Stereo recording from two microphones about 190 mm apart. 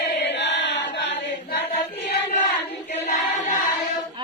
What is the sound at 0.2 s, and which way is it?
Chant, 65° left (ahead or behind).